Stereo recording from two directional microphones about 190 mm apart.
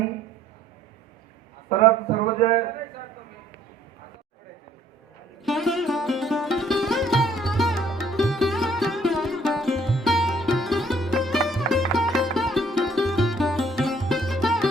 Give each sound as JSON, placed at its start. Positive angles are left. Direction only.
{"t": 2.4, "sound": "a man's voice", "side_deg": 35}
{"t": 5.4, "sound": "music", "side_deg": 0}